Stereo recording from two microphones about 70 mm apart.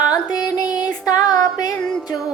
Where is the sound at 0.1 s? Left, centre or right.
Left.